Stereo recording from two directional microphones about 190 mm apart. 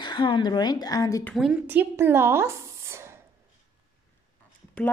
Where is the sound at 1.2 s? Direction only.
Centre (ahead or behind).